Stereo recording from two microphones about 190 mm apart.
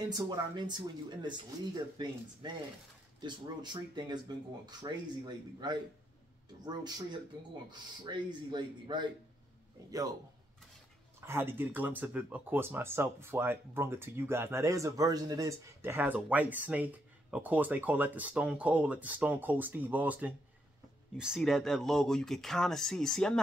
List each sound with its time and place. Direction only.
0.1 s speech: 20° right (ahead or behind)
3.2 s speech: 25° right (ahead or behind)
11.1 s speech: 15° right (ahead or behind); by 23.4 s 5° left (ahead or behind)